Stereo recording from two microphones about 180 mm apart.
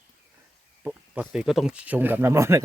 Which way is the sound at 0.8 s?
5° right (ahead or behind).